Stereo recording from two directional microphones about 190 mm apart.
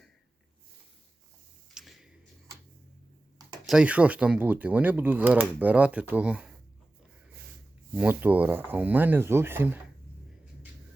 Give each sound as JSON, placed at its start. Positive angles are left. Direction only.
{"t": 1.7, "sound": "a sound", "side_deg": 0}
{"t": 3.7, "sound": "speech", "side_deg": -5}
{"t": 7.9, "sound": "speech", "side_deg": -10}